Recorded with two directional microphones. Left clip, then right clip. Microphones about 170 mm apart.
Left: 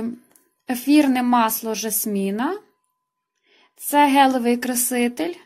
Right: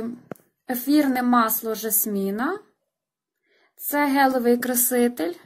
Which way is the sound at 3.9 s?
50° left (ahead or behind).